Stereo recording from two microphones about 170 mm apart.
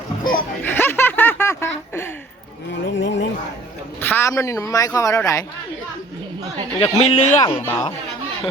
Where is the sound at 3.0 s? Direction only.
90° left.